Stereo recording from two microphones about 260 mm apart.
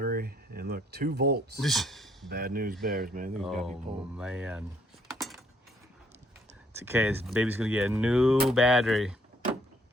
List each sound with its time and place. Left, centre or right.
0.0 s a sound: right
1.6 s speech: centre
2.3 s speech: right
3.3 s speech: centre
5.1 s cutlery: centre
6.7 s speech: centre